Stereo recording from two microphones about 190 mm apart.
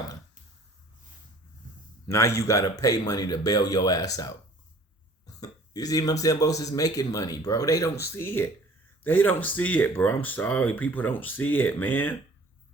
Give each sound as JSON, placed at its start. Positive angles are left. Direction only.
{"t": 2.0, "sound": "speech", "side_deg": 15}
{"t": 5.2, "sound": "a sound", "side_deg": 20}
{"t": 6.2, "sound": "speech", "side_deg": 20}